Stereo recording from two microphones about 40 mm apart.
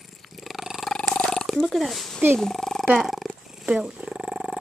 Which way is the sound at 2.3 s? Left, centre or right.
Centre.